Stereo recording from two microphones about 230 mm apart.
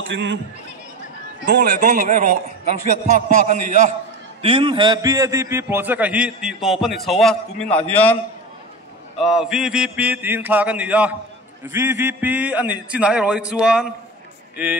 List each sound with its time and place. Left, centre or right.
0.0 s speech: right
1.4 s a man's voice: right
4.4 s a man's voice: right; by 8.1 s centre
9.2 s mantra: centre
11.6 s a man's voice: centre